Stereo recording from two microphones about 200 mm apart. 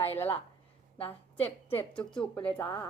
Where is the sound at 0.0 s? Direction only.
10° left (ahead or behind).